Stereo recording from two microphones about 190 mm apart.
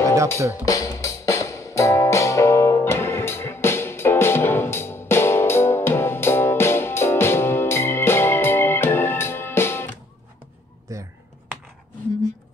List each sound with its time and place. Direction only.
0.4 s speech: 15° right (ahead or behind)
0.7 s music: 15° left (ahead or behind)